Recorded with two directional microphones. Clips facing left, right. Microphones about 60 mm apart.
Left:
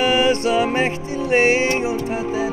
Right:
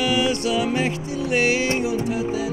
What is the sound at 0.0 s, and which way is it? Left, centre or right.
Music, left.